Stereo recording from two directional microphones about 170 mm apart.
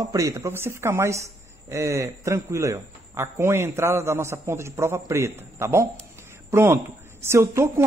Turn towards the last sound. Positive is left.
turn(degrees=-15)  # may be behind; listen again after turning